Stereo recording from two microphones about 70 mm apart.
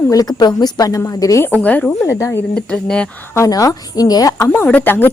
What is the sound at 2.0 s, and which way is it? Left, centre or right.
Speech, left.